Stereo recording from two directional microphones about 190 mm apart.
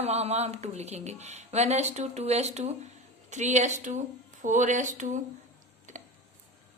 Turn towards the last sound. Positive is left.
turn(degrees=-40)  # may be behind; listen again after turning